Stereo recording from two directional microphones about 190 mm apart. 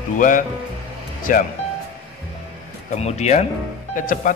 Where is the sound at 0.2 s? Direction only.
45° left (ahead or behind).